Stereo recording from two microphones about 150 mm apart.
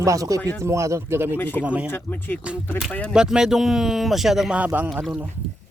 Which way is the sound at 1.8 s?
15° left (ahead or behind).